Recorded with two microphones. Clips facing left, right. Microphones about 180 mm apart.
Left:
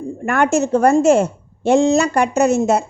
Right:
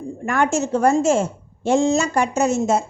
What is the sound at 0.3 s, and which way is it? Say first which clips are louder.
A woman's voice: left 4 dB; 60° left (ahead or behind).